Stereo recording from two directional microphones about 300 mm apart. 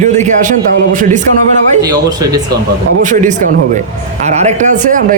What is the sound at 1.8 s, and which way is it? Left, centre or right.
Speech, centre.